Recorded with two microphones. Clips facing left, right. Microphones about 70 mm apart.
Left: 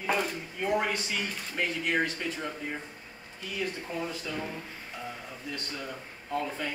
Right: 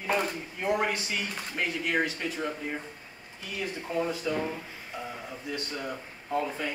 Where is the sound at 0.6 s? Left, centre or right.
Centre.